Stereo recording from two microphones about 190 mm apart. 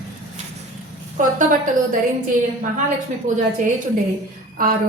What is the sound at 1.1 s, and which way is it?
Speech, 45° right (ahead or behind).